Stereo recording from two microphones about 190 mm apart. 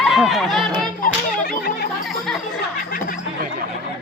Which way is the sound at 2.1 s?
Centre (ahead or behind).